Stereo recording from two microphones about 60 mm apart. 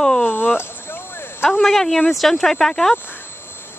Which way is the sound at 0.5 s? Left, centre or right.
Left.